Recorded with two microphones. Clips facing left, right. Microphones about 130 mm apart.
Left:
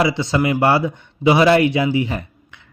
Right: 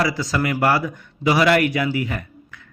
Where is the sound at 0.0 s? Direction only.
25° left (ahead or behind).